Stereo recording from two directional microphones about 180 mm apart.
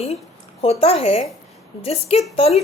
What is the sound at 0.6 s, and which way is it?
A woman's voice, 30° left (ahead or behind).